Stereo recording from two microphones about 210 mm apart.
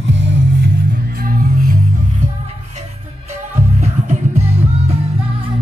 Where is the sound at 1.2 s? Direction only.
45° right (ahead or behind).